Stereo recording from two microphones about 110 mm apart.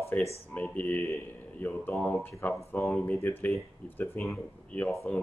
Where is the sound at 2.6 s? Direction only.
25° left (ahead or behind).